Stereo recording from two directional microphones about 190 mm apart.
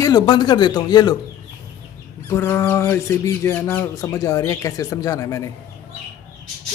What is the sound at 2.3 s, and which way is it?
Speech, 15° left (ahead or behind).